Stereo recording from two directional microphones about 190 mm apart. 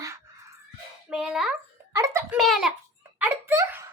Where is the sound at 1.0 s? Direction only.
5° right (ahead or behind).